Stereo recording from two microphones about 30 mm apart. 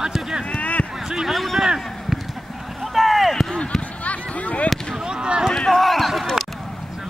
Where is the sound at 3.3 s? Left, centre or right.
Centre.